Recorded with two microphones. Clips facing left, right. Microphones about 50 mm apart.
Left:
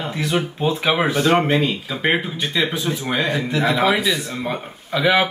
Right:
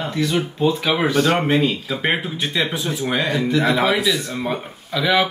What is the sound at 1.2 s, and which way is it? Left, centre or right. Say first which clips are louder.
Speech: right 1 dB; centre.